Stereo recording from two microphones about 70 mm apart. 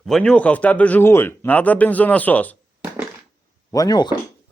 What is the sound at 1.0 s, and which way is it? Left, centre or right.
Speech, left.